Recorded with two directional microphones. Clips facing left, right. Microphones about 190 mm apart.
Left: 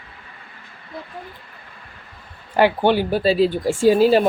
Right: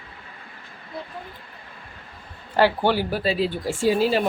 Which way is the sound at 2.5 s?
20° left (ahead or behind).